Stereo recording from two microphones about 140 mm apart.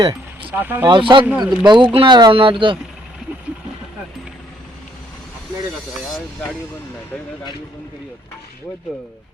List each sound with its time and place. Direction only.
0.5 s speech: 15° right (ahead or behind)
0.9 s speech: 35° right (ahead or behind)
1.2 s speech: 10° right (ahead or behind)
1.6 s speech: 35° right (ahead or behind)